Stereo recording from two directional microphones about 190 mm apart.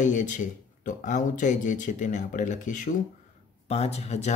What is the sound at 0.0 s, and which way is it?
Speech, 40° left (ahead or behind).